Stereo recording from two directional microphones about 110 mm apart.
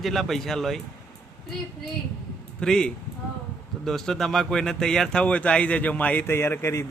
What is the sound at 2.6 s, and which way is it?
Speech, 5° left (ahead or behind).